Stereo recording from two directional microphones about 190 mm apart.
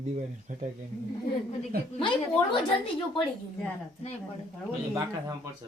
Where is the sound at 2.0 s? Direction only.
25° left (ahead or behind).